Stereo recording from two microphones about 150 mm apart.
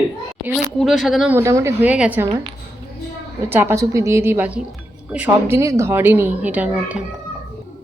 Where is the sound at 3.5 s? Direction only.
15° right (ahead or behind).